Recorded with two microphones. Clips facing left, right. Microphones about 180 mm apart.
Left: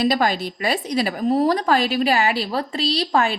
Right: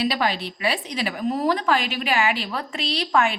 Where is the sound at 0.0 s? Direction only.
45° left (ahead or behind).